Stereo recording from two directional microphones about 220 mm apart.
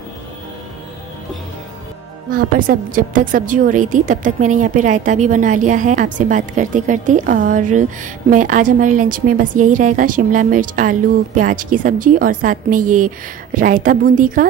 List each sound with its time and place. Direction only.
2.3 s a woman's voice: 40° right (ahead or behind)